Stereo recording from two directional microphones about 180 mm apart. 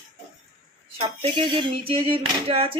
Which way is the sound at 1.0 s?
30° right (ahead or behind).